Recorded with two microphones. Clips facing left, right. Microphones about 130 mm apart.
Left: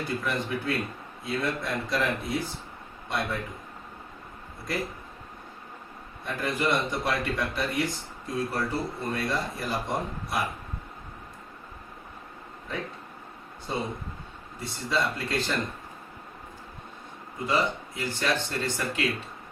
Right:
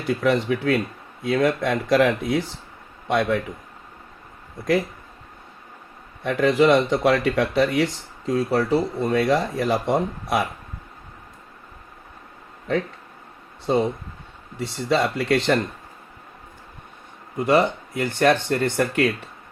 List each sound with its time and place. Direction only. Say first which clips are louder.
0.1 s speech: right 13 dB; 80° right
3.1 s speech: right 10 dB; 90° right
6.2 s speech: right 11 dB; 80° right
12.7 s speech: right 11 dB; 75° right (ahead or behind)
13.7 s speech: right 11 dB; 90° right
14.6 s speech: right 7 dB; 75° right (ahead or behind)
17.3 s speech: right 8 dB; 60° right (ahead or behind)